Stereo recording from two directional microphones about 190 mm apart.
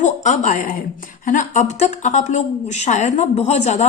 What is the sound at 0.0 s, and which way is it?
A woman's voice, 40° left (ahead or behind).